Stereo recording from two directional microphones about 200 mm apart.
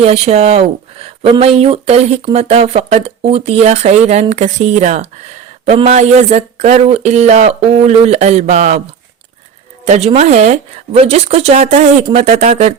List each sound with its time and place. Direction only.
0.0 s speech: 30° right (ahead or behind)
9.8 s speech: 30° right (ahead or behind)